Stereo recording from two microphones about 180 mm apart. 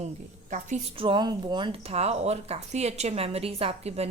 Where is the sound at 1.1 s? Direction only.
25° right (ahead or behind).